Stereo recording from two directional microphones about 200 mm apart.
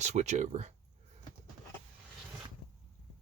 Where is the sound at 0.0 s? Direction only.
35° right (ahead or behind).